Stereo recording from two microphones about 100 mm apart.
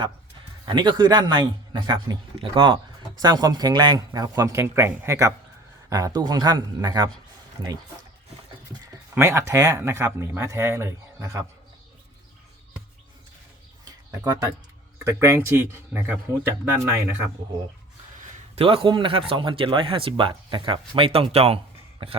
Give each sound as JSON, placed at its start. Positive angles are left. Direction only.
{"t": 0.6, "sound": "a man's voice", "side_deg": -50}
{"t": 3.2, "sound": "speech", "side_deg": -40}
{"t": 4.6, "sound": "a man's voice", "side_deg": -25}
{"t": 9.1, "sound": "a man's voice", "side_deg": -30}
{"t": 13.8, "sound": "a sound", "side_deg": -40}
{"t": 14.9, "sound": "a man's voice", "side_deg": -25}
{"t": 18.5, "sound": "speech", "side_deg": -60}
{"t": 22.0, "sound": "speech", "side_deg": -65}